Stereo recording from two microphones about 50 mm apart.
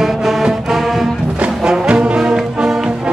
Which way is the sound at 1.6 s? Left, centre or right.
Centre.